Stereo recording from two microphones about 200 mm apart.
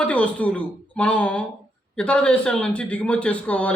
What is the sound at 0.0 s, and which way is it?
A man's voice, 5° left (ahead or behind).